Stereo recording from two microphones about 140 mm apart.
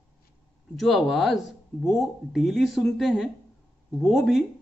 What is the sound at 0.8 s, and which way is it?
Speech, centre (ahead or behind).